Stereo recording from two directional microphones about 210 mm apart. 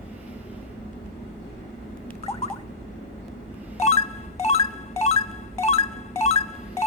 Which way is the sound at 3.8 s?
30° left (ahead or behind).